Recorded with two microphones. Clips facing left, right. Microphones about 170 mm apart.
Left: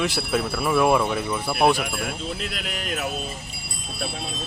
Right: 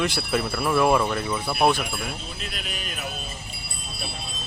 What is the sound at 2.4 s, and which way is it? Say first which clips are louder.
Speech: left 4 dB; 85° left.